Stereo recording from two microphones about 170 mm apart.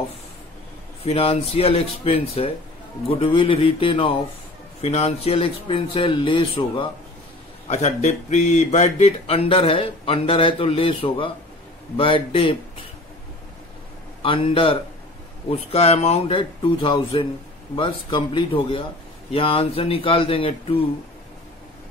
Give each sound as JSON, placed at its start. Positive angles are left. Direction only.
{"t": 1.0, "sound": "speech", "side_deg": 35}
{"t": 7.6, "sound": "speech", "side_deg": 45}
{"t": 14.2, "sound": "speech", "side_deg": 30}